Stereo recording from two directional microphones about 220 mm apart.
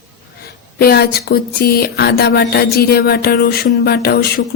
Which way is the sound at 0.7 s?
45° left (ahead or behind).